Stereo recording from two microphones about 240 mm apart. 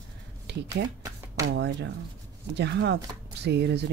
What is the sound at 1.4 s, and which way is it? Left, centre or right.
Speech, right.